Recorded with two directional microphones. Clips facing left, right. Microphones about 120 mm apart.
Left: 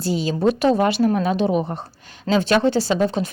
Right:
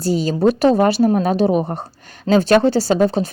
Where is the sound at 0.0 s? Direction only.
40° right (ahead or behind).